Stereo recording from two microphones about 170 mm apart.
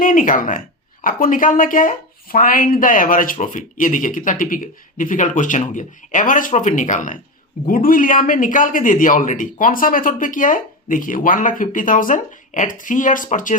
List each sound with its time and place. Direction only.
0.0 s a man's voice: 50° left (ahead or behind)